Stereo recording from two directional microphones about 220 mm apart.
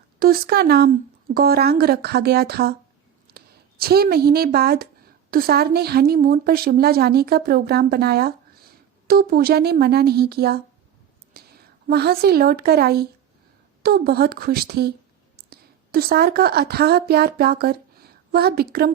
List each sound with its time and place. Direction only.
0.2 s a woman's voice: 45° right (ahead or behind)
11.3 s a sound: 45° right (ahead or behind)
11.9 s a woman's voice: 45° right (ahead or behind)